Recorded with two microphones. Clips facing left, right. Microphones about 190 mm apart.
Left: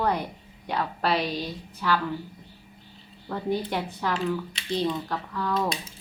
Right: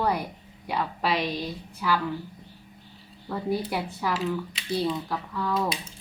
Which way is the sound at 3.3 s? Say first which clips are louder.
Even; 5° right (ahead or behind).